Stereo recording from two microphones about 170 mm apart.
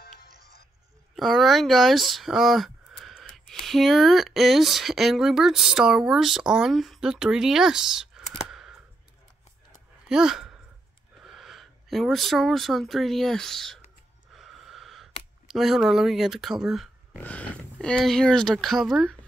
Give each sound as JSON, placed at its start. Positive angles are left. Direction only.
{"t": 0.0, "sound": "music", "side_deg": 65}
{"t": 1.1, "sound": "speech", "side_deg": 0}
{"t": 8.5, "sound": "a sound", "side_deg": -5}
{"t": 10.0, "sound": "a sound", "side_deg": -5}
{"t": 11.2, "sound": "speech", "side_deg": 0}
{"t": 14.3, "sound": "snort", "side_deg": 0}
{"t": 15.4, "sound": "speech", "side_deg": 0}
{"t": 17.2, "sound": "speech", "side_deg": 10}